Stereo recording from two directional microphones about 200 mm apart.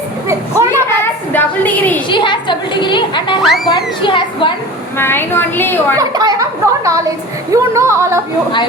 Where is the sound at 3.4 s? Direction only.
Centre (ahead or behind).